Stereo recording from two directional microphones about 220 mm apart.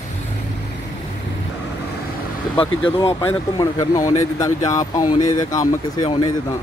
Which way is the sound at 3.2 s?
15° left (ahead or behind).